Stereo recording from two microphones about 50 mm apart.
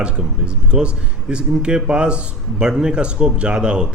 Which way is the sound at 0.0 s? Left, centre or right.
Centre.